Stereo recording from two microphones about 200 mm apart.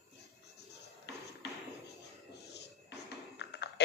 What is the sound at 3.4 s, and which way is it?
Typing, 55° left (ahead or behind).